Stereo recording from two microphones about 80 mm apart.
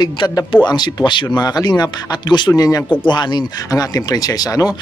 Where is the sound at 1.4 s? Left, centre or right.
Left.